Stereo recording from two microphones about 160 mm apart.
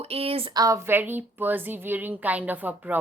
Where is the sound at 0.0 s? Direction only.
40° right (ahead or behind).